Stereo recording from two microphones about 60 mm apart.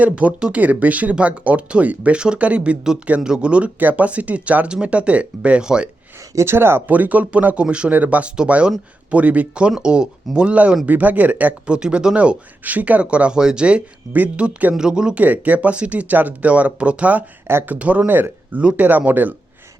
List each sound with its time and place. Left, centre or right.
0.0 s speech: right
3.8 s speech: right
6.3 s speech: right
6.8 s speech: right
15.2 s speech: right
17.5 s speech: right
17.7 s speech: right